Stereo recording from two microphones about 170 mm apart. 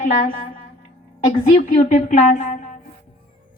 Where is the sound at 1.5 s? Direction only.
50° left (ahead or behind).